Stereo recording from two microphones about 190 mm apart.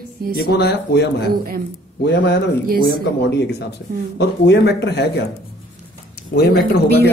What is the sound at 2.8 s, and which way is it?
Speech, 65° left (ahead or behind).